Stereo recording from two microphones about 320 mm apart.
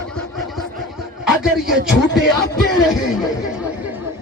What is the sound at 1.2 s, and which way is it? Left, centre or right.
Speech, centre.